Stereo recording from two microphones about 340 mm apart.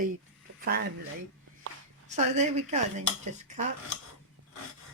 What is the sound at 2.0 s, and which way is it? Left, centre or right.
Speech, centre.